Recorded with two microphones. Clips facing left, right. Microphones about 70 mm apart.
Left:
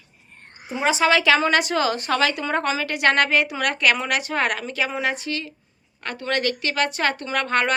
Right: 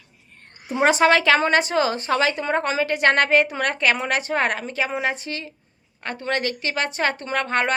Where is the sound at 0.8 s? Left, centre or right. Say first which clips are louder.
Right 2 dB; right.